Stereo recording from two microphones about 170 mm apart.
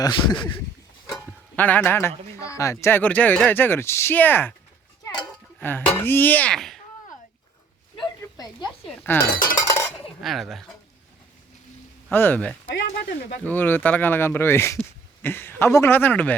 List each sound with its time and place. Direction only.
0.0 s speech: 25° left (ahead or behind)
1.5 s a man's voice: 10° left (ahead or behind)
5.5 s speech: 10° left (ahead or behind)
7.9 s a sound: 25° left (ahead or behind)
9.0 s a man's voice: 10° left (ahead or behind)
9.6 s cutlery: 20° left (ahead or behind)
10.2 s speech: centre (ahead or behind)
12.1 s a man's voice: 10° left (ahead or behind)
12.6 s speech: 85° left
13.4 s a man's voice: 10° left (ahead or behind)